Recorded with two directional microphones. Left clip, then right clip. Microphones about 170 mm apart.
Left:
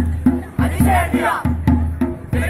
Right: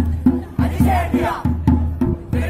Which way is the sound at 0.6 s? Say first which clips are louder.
Left 2 dB; centre (ahead or behind).